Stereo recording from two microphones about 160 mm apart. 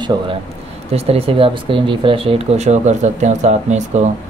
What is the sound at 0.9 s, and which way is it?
Speech, 40° right (ahead or behind).